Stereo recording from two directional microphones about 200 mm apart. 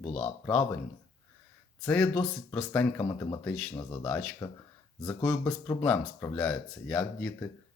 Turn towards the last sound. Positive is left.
turn(degrees=10)  # may be behind; listen again after turning